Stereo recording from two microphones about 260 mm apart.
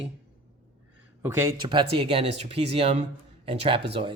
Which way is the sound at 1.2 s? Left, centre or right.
Centre.